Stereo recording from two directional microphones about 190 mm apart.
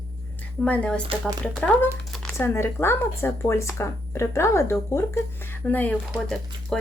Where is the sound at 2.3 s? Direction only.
15° left (ahead or behind).